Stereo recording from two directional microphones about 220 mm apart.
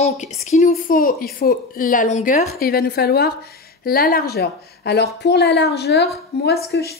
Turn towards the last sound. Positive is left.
turn(degrees=45)  # may be behind; listen again after turning